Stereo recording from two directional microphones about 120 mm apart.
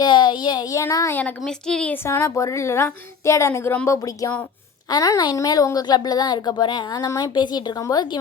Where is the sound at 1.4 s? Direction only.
5° left (ahead or behind).